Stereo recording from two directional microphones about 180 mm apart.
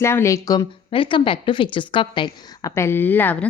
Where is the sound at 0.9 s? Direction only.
30° left (ahead or behind).